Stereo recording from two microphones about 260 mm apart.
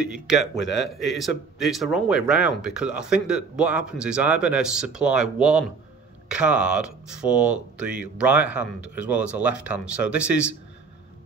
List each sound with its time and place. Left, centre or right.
0.0 s speech: centre
0.6 s speech: left
0.8 s speech: centre